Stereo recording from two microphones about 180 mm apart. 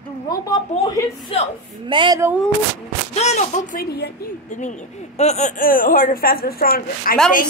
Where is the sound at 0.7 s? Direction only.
45° left (ahead or behind).